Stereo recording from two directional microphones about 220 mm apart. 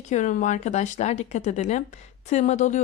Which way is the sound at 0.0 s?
35° left (ahead or behind).